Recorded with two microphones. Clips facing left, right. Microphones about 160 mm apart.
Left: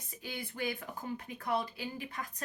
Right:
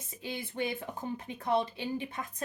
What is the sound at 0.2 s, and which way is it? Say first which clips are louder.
Speech: right 4 dB; 25° right (ahead or behind).